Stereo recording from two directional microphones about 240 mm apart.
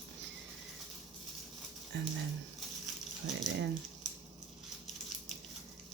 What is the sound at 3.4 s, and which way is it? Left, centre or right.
Speech, right.